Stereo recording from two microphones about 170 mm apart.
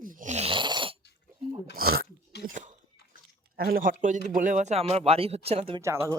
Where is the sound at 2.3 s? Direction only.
75° left (ahead or behind).